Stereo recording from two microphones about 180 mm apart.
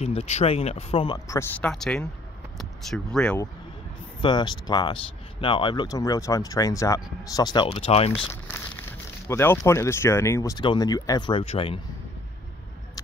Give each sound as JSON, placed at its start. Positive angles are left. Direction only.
{"t": 0.0, "sound": "speech", "side_deg": 35}
{"t": 1.6, "sound": "speech", "side_deg": 5}
{"t": 4.2, "sound": "speech", "side_deg": 25}
{"t": 8.3, "sound": "speech", "side_deg": 10}